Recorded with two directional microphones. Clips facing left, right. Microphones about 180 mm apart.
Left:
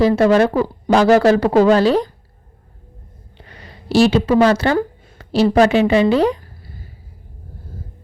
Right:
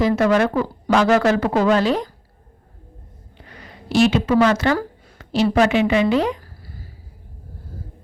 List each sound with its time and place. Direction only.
0.0 s speech: 30° left (ahead or behind)
3.3 s speech: 30° left (ahead or behind)
6.4 s a sound: 20° left (ahead or behind)